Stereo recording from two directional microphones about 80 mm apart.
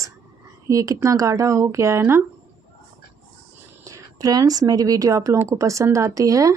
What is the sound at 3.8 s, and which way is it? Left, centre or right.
A woman's voice, right.